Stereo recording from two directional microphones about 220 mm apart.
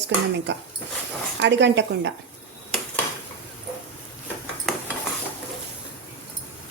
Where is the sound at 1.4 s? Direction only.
55° right (ahead or behind).